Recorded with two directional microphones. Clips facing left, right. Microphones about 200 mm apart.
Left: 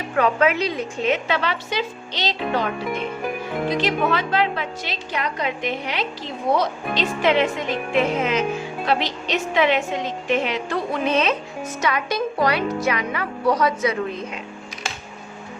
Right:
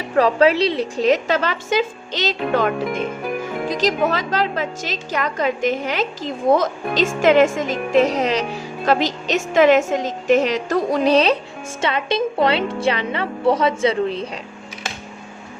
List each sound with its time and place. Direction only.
0.2 s a woman's voice: 35° right (ahead or behind)
3.7 s a woman's voice: 40° right (ahead or behind)